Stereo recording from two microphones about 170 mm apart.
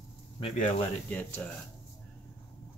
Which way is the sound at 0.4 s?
40° left (ahead or behind).